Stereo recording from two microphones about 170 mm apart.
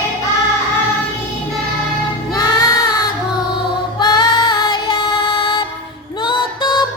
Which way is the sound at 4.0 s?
25° left (ahead or behind).